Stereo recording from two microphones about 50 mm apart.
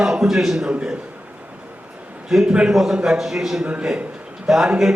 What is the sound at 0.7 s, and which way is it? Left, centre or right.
Speech, right.